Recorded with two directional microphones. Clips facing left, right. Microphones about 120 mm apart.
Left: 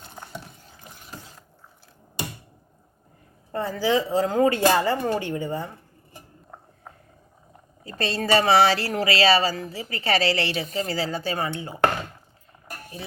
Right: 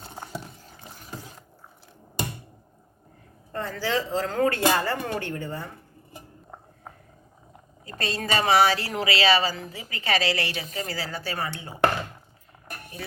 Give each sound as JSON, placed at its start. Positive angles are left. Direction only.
{"t": 3.5, "sound": "speech", "side_deg": 10}
{"t": 7.9, "sound": "a woman's voice", "side_deg": 30}